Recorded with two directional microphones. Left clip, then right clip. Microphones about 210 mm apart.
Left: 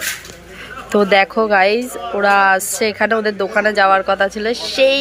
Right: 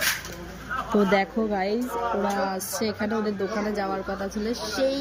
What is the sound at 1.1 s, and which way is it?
Speech, 65° left (ahead or behind).